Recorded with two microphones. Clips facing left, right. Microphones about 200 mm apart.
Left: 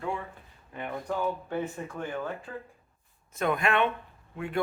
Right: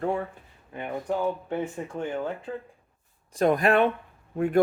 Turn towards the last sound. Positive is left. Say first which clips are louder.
# right 9 dB
turn(degrees=-45)  # may be behind; listen again after turning